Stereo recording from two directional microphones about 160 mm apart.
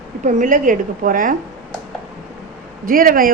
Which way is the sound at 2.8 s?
60° right (ahead or behind).